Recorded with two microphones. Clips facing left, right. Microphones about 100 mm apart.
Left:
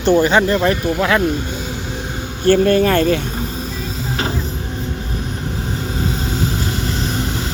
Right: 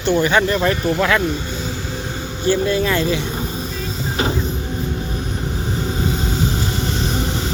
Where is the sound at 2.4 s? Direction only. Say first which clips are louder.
Left 5 dB; 55° left (ahead or behind).